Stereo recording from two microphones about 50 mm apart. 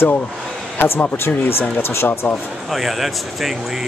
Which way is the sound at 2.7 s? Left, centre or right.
Centre.